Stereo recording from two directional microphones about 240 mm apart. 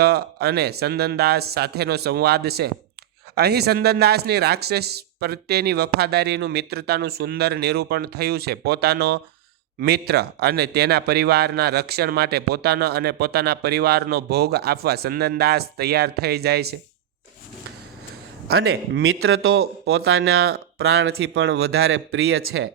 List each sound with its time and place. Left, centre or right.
0.0 s a man's voice: right
18.4 s speech: right